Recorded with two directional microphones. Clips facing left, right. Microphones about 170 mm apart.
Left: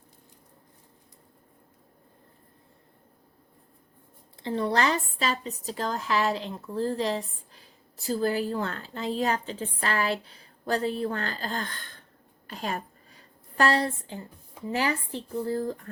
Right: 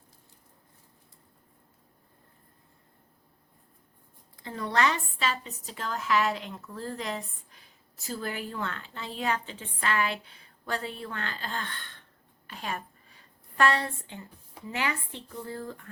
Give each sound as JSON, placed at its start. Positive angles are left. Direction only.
{"t": 4.4, "sound": "speech", "side_deg": 30}
{"t": 12.5, "sound": "a sound", "side_deg": 40}
{"t": 14.7, "sound": "speech", "side_deg": 35}